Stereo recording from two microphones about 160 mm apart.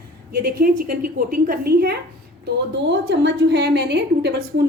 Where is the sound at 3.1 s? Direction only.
90° right.